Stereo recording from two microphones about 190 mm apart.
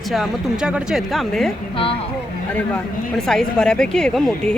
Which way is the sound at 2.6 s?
5° left (ahead or behind).